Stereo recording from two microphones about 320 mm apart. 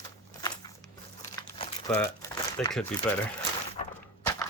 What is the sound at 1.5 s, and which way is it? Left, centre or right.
Crumpling, centre.